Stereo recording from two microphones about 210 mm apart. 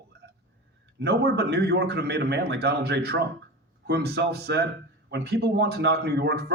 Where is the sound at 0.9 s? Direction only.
50° right (ahead or behind).